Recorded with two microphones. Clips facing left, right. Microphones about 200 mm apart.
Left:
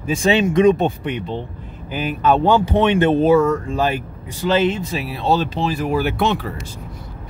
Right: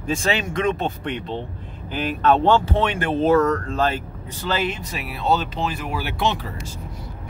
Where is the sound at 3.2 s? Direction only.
10° left (ahead or behind); by 6.3 s 50° left (ahead or behind).